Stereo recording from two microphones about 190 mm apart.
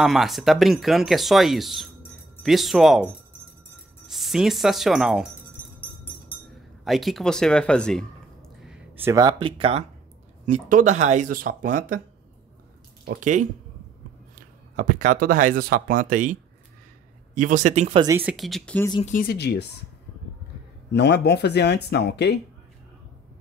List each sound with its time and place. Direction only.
0.0 s speech: centre (ahead or behind)
4.1 s speech: centre (ahead or behind)
6.8 s speech: centre (ahead or behind)
9.1 s speech: 25° right (ahead or behind)
10.4 s speech: 40° right (ahead or behind)
13.0 s speech: 50° right (ahead or behind)
14.8 s speech: 45° right (ahead or behind)
18.0 s speech: 15° right (ahead or behind)
18.3 s speech: centre (ahead or behind)
19.0 s speech: 50° left (ahead or behind)
20.9 s speech: 60° left (ahead or behind)